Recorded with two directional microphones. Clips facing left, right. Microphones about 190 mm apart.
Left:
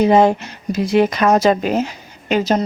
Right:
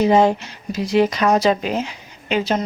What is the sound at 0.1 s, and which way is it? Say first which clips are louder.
Speech: left 2 dB; 55° left (ahead or behind).